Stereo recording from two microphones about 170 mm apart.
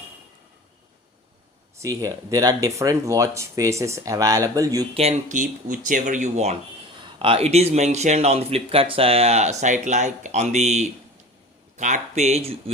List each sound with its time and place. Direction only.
1.8 s speech: 20° right (ahead or behind)
4.9 s a man's voice: 40° right (ahead or behind)